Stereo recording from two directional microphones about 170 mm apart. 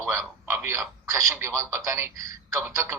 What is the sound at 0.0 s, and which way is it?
Speech, 15° right (ahead or behind).